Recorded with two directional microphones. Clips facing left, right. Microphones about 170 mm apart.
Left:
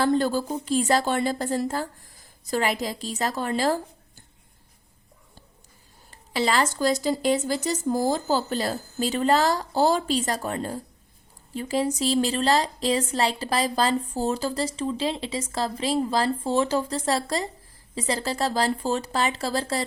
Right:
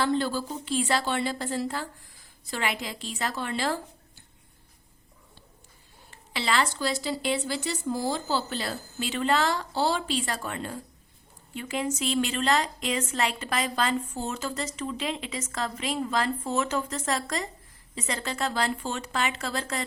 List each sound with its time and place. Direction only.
0.0 s speech: 45° left (ahead or behind)
6.1 s a woman's voice: 40° left (ahead or behind)